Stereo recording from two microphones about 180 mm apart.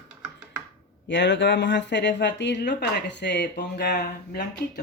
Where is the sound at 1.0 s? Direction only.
80° left; by 4.4 s 65° left (ahead or behind).